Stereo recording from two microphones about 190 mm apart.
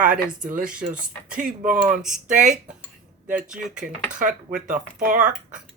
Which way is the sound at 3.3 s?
5° right (ahead or behind).